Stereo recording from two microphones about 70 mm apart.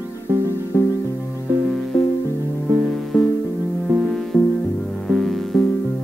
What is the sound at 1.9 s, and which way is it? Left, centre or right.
Music, left.